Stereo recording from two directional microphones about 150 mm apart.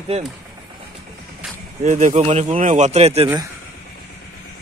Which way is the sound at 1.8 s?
50° right (ahead or behind).